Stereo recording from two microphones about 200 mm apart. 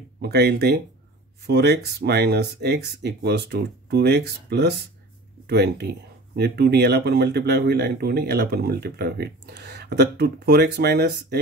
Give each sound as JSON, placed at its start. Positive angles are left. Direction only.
{"t": 0.2, "sound": "speech", "side_deg": -55}